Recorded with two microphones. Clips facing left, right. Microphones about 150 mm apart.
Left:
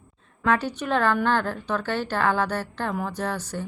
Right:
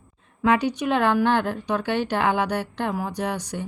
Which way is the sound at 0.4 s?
15° right (ahead or behind).